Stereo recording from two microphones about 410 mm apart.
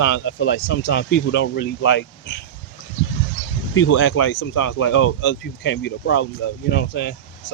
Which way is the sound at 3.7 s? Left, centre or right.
Left.